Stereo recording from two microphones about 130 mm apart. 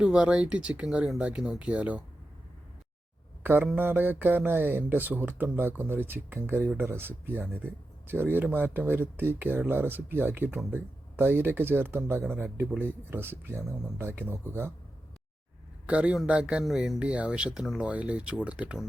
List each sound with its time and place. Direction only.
0.0 s speech: 5° right (ahead or behind)
3.4 s mantra: 15° right (ahead or behind)
3.8 s speech: 15° right (ahead or behind)
15.9 s speech: 10° right (ahead or behind)